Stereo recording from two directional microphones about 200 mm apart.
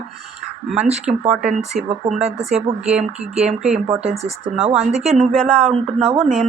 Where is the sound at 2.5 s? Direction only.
30° right (ahead or behind).